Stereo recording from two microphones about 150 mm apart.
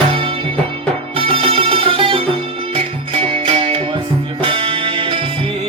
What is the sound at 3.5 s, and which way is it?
Music, 40° right (ahead or behind).